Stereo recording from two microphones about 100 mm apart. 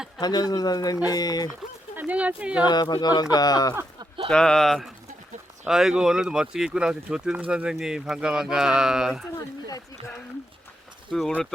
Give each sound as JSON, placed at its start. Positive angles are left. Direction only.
{"t": 0.2, "sound": "speech", "side_deg": 40}
{"t": 2.0, "sound": "speech", "side_deg": -15}
{"t": 2.6, "sound": "speech", "side_deg": 45}
{"t": 4.3, "sound": "speech", "side_deg": 10}
{"t": 11.1, "sound": "speech", "side_deg": 10}